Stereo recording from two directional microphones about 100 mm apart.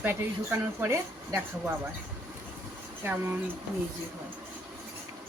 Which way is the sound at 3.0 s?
25° right (ahead or behind).